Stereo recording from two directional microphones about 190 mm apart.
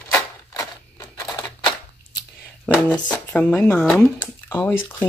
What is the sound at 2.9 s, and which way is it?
Speech, 5° left (ahead or behind).